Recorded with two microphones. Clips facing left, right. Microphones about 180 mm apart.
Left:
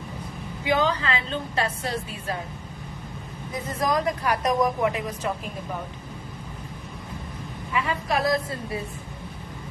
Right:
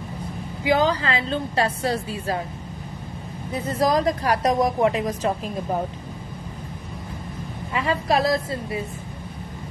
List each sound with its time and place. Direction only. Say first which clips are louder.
0.7 s speech: right 3 dB; 35° right (ahead or behind)
3.8 s speech: right 4 dB; 35° right (ahead or behind)
7.7 s speech: right 4 dB; 35° right (ahead or behind)